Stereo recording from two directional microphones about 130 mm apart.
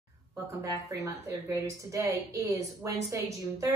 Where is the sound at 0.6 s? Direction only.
25° right (ahead or behind).